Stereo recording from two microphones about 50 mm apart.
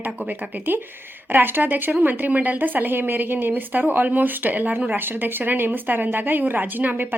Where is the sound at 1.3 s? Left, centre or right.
Right.